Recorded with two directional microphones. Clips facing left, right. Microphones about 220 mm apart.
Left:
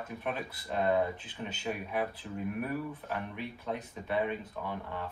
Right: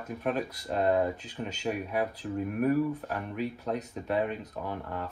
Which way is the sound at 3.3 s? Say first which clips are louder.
Right 5 dB; 40° right (ahead or behind).